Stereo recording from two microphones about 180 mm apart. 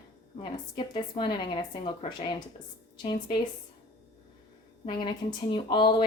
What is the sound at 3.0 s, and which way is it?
Speech, 25° left (ahead or behind).